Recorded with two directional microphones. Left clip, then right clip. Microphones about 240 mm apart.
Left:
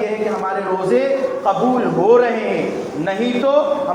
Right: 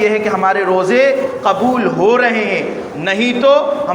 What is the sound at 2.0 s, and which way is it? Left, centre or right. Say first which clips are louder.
A man's voice: right 1 dB; right.